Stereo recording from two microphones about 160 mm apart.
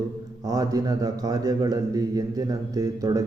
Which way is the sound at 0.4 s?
20° right (ahead or behind).